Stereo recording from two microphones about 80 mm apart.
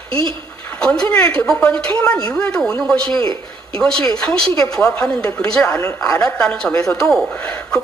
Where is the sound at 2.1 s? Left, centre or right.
Left.